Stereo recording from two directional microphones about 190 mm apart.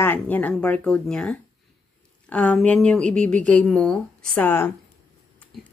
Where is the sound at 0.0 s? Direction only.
10° left (ahead or behind).